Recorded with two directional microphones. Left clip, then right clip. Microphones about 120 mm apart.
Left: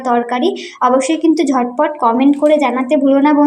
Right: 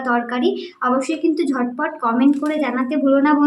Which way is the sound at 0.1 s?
30° left (ahead or behind).